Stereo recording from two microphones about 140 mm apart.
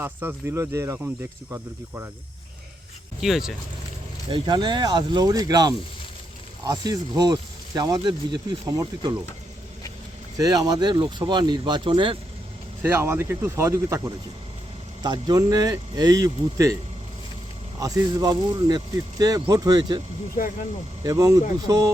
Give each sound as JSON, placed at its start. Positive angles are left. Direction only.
{"t": 0.0, "sound": "speech", "side_deg": -15}
{"t": 3.2, "sound": "speech", "side_deg": 0}
{"t": 4.3, "sound": "speech", "side_deg": -35}
{"t": 10.3, "sound": "speech", "side_deg": -25}
{"t": 12.8, "sound": "speech", "side_deg": -15}
{"t": 17.7, "sound": "speech", "side_deg": -25}
{"t": 20.3, "sound": "speech", "side_deg": 80}
{"t": 21.0, "sound": "speech", "side_deg": -25}